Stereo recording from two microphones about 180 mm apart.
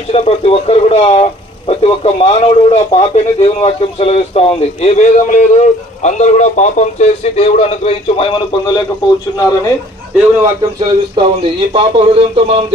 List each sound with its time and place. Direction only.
0.1 s a man's voice: 35° left (ahead or behind)
10.4 s speech: 25° right (ahead or behind)